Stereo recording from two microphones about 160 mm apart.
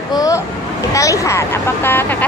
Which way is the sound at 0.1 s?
20° left (ahead or behind).